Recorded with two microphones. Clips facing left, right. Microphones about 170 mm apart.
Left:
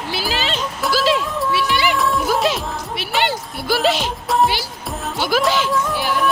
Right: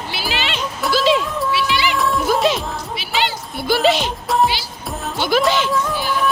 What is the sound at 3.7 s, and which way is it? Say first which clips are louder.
Music: right 2 dB; centre (ahead or behind).